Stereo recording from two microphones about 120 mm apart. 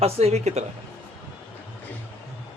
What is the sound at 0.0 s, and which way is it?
Speech, 65° right (ahead or behind).